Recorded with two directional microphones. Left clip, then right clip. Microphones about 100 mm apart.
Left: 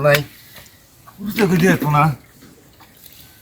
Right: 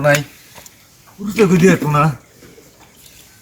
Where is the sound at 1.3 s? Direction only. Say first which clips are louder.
Right 4 dB; 15° right (ahead or behind).